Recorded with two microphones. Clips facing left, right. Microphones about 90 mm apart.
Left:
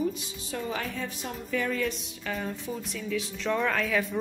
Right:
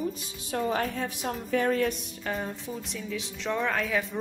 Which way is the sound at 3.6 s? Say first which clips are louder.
Right 1 dB; 5° right (ahead or behind).